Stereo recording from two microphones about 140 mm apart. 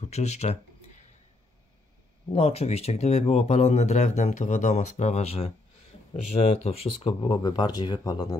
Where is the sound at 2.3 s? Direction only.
45° left (ahead or behind).